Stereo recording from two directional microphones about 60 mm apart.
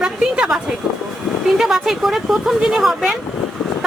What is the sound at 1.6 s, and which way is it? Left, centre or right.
Speech, centre.